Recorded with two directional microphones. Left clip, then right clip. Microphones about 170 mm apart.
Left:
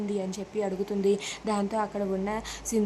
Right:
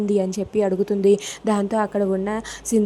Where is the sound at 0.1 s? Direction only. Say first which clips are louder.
Right 11 dB; 35° right (ahead or behind).